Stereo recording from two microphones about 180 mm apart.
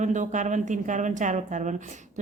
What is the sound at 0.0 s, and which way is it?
A woman's voice, 45° right (ahead or behind).